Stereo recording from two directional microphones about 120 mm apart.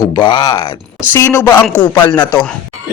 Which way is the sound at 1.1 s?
20° left (ahead or behind).